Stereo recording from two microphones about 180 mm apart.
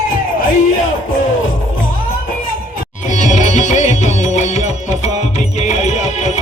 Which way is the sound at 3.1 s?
40° left (ahead or behind).